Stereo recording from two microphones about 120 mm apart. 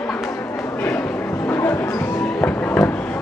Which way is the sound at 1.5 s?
20° left (ahead or behind).